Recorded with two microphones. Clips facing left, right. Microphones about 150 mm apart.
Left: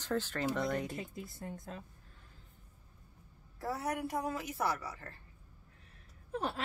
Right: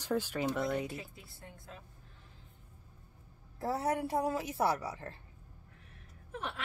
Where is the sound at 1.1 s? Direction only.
40° left (ahead or behind).